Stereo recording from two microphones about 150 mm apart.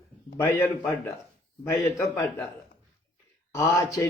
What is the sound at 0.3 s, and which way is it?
Speech, 20° left (ahead or behind).